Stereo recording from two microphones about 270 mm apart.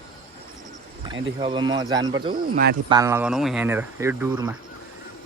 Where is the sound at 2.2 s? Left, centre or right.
Right.